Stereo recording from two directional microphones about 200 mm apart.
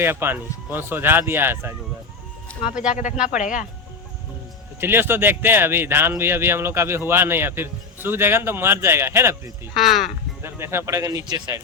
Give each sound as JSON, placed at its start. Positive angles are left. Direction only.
{"t": 0.0, "sound": "speech", "side_deg": -10}
{"t": 2.9, "sound": "speech", "side_deg": 40}
{"t": 4.8, "sound": "speech", "side_deg": -10}
{"t": 9.7, "sound": "speech", "side_deg": 0}
{"t": 10.4, "sound": "speech", "side_deg": -10}